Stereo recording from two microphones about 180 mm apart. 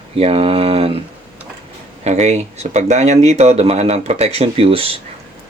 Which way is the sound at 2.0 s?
35° right (ahead or behind).